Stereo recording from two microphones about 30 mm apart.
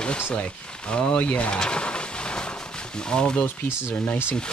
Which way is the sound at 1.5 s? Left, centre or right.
Left.